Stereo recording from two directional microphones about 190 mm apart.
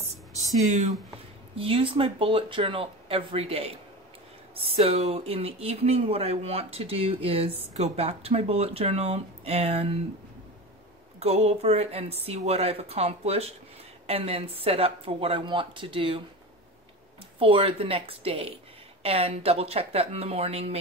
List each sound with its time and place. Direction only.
0.7 s speech: 40° right (ahead or behind)
1.6 s speech: 30° right (ahead or behind)
11.1 s speech: 35° right (ahead or behind)
17.4 s speech: 30° right (ahead or behind)